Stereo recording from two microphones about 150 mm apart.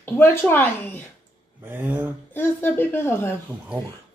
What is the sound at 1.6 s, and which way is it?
Speech, 15° right (ahead or behind).